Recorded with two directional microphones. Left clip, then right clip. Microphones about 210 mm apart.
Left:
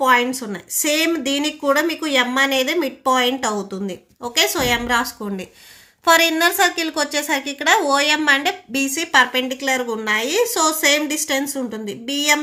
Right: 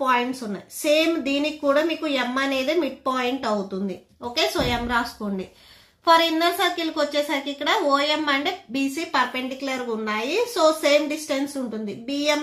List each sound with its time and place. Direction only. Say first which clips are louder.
0.0 s a woman's voice: left 6 dB; 45° left (ahead or behind)